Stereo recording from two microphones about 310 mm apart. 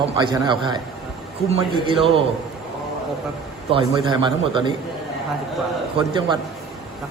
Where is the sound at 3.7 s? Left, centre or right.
Centre.